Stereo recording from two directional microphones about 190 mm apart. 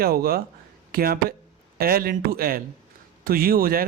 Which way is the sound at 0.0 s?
50° right (ahead or behind).